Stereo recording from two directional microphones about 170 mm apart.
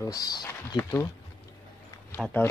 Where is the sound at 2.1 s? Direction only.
5° left (ahead or behind).